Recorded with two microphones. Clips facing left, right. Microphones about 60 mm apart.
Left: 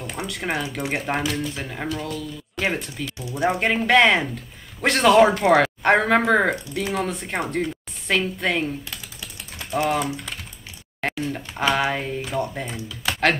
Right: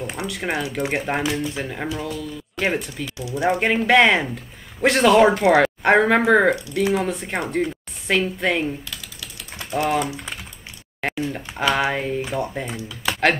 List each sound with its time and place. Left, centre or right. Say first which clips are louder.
0.1 s speech: left 2 dB; centre
9.8 s speech: right 1 dB; centre